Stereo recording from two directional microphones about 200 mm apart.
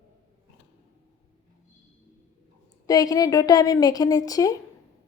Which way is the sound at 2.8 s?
20° left (ahead or behind).